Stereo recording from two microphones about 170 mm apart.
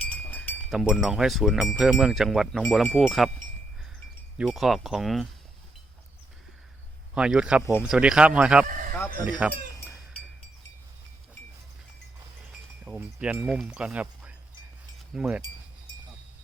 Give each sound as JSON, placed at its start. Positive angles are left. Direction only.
{"t": 0.0, "sound": "a sound", "side_deg": 10}
{"t": 0.7, "sound": "speech", "side_deg": 0}
{"t": 4.4, "sound": "speech", "side_deg": 0}
{"t": 7.1, "sound": "speech", "side_deg": -5}
{"t": 8.6, "sound": "speech", "side_deg": -50}
{"t": 9.2, "sound": "speech", "side_deg": -10}
{"t": 12.8, "sound": "speech", "side_deg": -10}